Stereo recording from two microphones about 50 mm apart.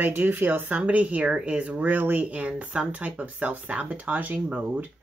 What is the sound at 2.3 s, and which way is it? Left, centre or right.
Speech, right.